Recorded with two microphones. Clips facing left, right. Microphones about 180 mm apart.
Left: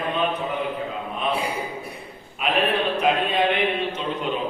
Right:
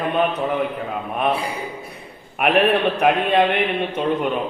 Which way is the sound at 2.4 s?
65° right (ahead or behind).